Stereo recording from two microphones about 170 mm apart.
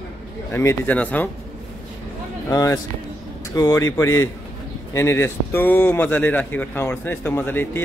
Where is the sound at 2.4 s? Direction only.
20° left (ahead or behind).